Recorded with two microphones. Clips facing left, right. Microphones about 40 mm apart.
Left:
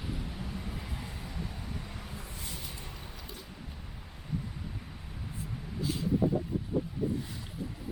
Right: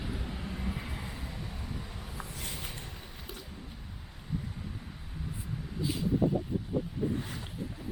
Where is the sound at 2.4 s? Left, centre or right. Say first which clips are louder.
Right 2 dB; right.